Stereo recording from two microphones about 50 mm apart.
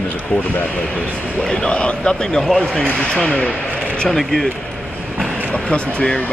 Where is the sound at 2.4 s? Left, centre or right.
Centre.